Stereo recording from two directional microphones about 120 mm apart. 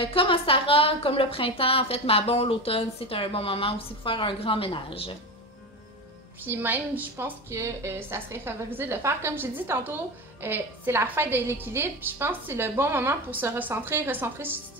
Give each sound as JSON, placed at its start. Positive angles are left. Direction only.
{"t": 0.0, "sound": "a woman's voice", "side_deg": 50}
{"t": 6.4, "sound": "a woman's voice", "side_deg": -15}